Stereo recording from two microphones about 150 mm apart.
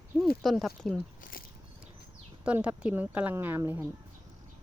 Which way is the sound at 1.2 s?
70° left (ahead or behind).